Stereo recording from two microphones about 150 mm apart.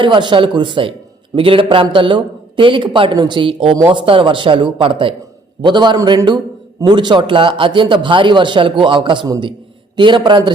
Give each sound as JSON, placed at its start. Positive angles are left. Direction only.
{"t": 0.0, "sound": "a man's voice", "side_deg": -35}